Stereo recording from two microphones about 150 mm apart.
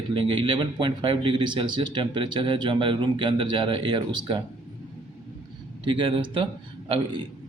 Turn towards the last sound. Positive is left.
turn(degrees=-35)  # may be behind; listen again after turning